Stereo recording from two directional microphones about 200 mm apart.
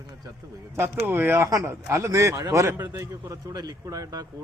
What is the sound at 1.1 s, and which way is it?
Speech, 10° right (ahead or behind).